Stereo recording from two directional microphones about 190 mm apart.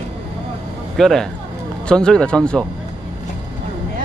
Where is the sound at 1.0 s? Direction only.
Centre (ahead or behind).